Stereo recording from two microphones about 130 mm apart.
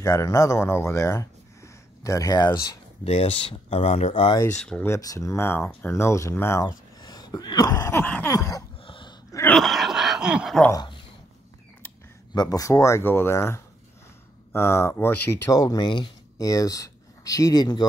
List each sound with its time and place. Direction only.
0.0 s speech: 20° left (ahead or behind)
3.0 s speech: 50° left (ahead or behind)
4.6 s speech: 5° left (ahead or behind)
4.8 s speech: 25° left (ahead or behind)
7.0 s throat clearing: 30° left (ahead or behind)
8.0 s a sound: 10° left (ahead or behind)
8.3 s speech: 25° left (ahead or behind)
8.8 s dog: 40° left (ahead or behind)
9.3 s throat clearing: 15° left (ahead or behind)
9.6 s a sound: centre (ahead or behind)
10.7 s speech: 35° left (ahead or behind)
12.4 s speech: 25° left (ahead or behind)